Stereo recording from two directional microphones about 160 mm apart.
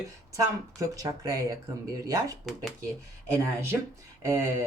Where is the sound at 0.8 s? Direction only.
20° right (ahead or behind).